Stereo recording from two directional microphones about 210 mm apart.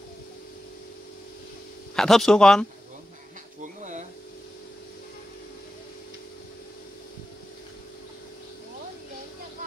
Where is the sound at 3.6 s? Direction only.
35° right (ahead or behind).